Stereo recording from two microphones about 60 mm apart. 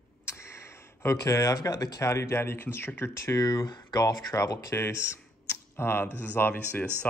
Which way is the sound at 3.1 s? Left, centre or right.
Left.